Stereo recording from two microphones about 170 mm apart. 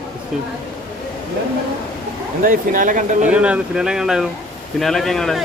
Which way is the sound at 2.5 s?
50° right (ahead or behind).